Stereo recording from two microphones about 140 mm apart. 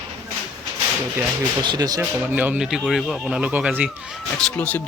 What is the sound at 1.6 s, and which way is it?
Speech, 30° right (ahead or behind).